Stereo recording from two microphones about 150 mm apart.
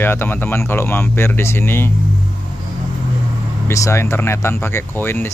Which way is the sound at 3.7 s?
20° left (ahead or behind).